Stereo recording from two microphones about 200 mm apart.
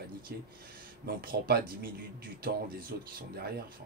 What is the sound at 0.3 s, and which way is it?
Speech, 50° right (ahead or behind).